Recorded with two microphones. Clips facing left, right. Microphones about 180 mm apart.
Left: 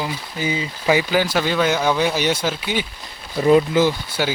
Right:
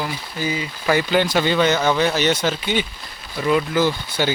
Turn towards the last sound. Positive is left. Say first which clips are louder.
# even
turn(degrees=5)  # may be behind; listen again after turning